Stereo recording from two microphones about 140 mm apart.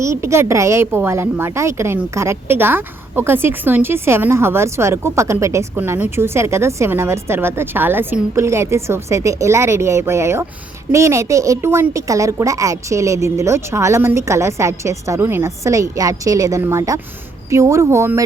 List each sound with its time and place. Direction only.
0.0 s a woman's voice: 20° right (ahead or behind)